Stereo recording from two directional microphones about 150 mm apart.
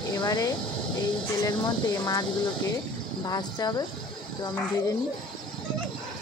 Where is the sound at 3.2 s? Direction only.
30° left (ahead or behind).